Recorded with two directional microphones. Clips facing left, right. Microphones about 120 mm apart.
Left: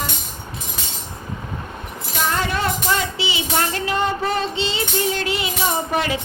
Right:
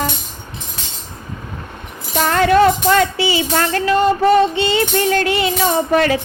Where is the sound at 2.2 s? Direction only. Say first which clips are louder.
Right 10 dB; 70° right (ahead or behind).